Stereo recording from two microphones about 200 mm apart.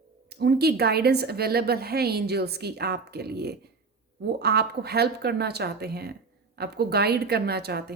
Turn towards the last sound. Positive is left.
turn(degrees=-55)  # may be behind; listen again after turning